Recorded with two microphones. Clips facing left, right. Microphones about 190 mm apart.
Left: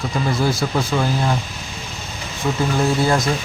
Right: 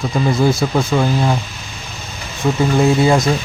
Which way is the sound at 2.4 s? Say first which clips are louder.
Right 5 dB; 10° right (ahead or behind).